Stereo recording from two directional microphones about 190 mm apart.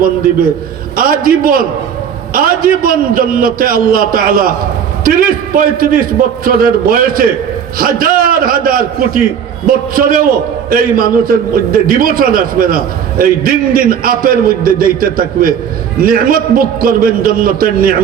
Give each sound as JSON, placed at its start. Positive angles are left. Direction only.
{"t": 0.9, "sound": "a man's voice", "side_deg": -50}